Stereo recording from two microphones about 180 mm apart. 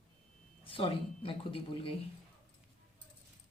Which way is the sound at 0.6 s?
30° left (ahead or behind).